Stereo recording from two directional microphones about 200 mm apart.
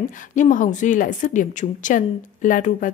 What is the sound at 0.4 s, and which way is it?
A woman's voice, 40° left (ahead or behind).